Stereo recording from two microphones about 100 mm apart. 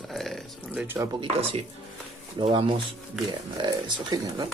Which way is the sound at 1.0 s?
25° right (ahead or behind).